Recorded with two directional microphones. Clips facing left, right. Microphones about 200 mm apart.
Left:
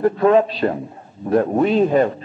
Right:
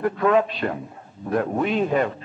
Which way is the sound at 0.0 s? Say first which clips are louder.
Left 5 dB; 30° left (ahead or behind).